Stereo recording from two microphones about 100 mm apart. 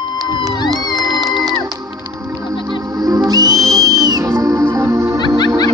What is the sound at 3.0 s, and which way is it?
Music, 40° right (ahead or behind).